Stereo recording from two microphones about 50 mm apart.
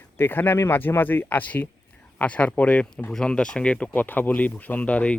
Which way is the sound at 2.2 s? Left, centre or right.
Left.